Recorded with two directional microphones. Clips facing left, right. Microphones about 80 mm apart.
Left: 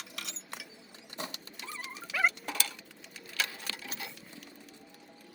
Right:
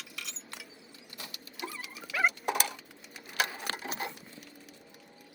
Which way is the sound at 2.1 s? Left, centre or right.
Centre.